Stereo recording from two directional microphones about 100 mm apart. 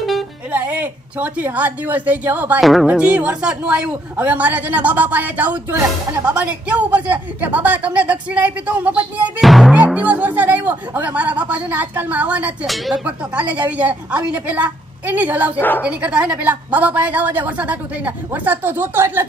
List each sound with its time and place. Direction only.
0.5 s a woman's voice: 20° right (ahead or behind)
2.6 s music: centre (ahead or behind)
2.9 s a woman's voice: 15° right (ahead or behind)
9.4 s music: centre (ahead or behind)
9.9 s a woman's voice: 15° right (ahead or behind)
12.6 s music: centre (ahead or behind)
12.9 s a woman's voice: 15° right (ahead or behind)